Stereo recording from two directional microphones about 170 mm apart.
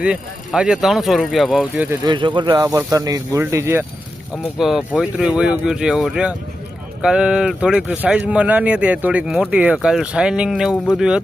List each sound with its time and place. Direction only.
0.0 s speech: 5° right (ahead or behind)
1.7 s speech: 15° right (ahead or behind)
2.0 s speech: 25° right (ahead or behind)
4.5 s speech: centre (ahead or behind)